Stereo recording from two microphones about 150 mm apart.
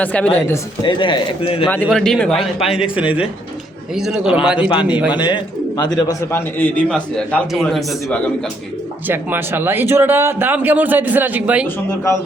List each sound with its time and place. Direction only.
0.0 s a man's voice: 10° left (ahead or behind)
0.8 s speech: 30° left (ahead or behind)
1.9 s a man's voice: 5° left (ahead or behind)
4.7 s a man's voice: 30° left (ahead or behind)
6.6 s a man's voice: 10° left (ahead or behind)
9.0 s speech: 15° right (ahead or behind)